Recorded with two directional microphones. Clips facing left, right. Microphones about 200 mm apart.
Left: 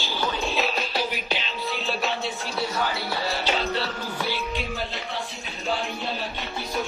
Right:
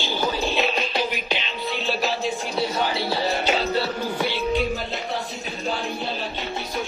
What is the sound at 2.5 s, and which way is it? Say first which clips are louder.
Speech: right 2 dB; 20° right (ahead or behind).